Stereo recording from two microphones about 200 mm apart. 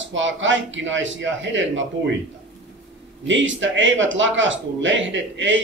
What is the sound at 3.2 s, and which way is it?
Speech, 70° right (ahead or behind).